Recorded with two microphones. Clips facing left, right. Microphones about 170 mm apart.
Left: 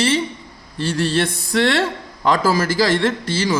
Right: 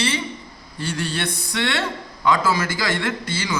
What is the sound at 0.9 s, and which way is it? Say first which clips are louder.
A man's voice: left 7 dB; 35° left (ahead or behind).